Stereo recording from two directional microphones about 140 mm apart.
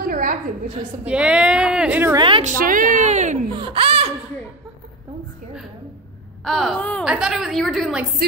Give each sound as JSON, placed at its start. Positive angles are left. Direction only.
{"t": 0.0, "sound": "a sound", "side_deg": -75}
{"t": 1.0, "sound": "speech", "side_deg": -5}
{"t": 2.1, "sound": "a woman's voice", "side_deg": -35}
{"t": 2.6, "sound": "a woman's voice", "side_deg": -75}
{"t": 3.5, "sound": "speech", "side_deg": -40}
{"t": 6.4, "sound": "a woman's voice", "side_deg": 0}
{"t": 7.1, "sound": "a woman's voice", "side_deg": -5}